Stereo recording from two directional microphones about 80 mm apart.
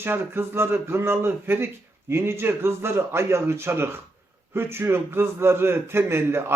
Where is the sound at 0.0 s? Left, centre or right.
Right.